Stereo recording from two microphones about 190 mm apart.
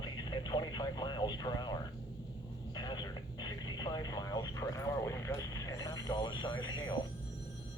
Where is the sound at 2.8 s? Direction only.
20° left (ahead or behind).